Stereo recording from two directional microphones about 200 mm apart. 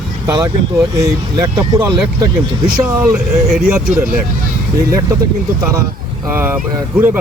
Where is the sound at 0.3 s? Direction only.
15° right (ahead or behind).